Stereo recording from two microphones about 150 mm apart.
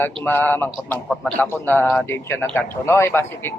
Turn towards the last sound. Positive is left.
turn(degrees=15)  # may be behind; listen again after turning